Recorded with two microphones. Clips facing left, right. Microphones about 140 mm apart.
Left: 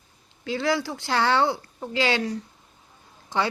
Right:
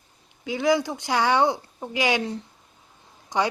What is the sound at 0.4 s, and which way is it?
Speech, 15° right (ahead or behind).